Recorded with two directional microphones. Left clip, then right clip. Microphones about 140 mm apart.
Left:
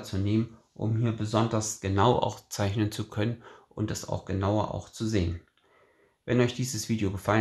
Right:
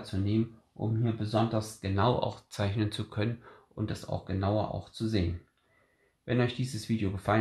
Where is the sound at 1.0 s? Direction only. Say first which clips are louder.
Left 2 dB; 45° left (ahead or behind).